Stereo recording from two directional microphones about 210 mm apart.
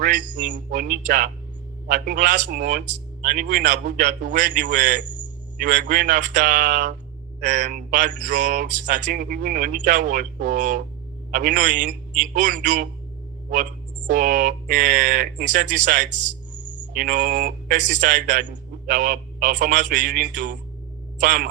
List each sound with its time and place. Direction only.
0.0 s a man's voice: 40° right (ahead or behind)
14.1 s a man's voice: 40° right (ahead or behind)
16.5 s a sound: 60° right (ahead or behind)
17.0 s a man's voice: 40° right (ahead or behind)